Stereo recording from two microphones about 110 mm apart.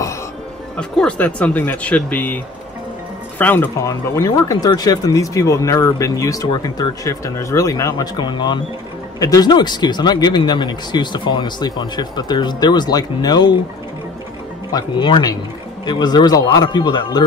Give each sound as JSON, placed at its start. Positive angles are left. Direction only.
{"t": 0.7, "sound": "speech", "side_deg": 10}
{"t": 3.8, "sound": "speech", "side_deg": 30}
{"t": 8.2, "sound": "speech", "side_deg": 40}
{"t": 14.7, "sound": "speech", "side_deg": 40}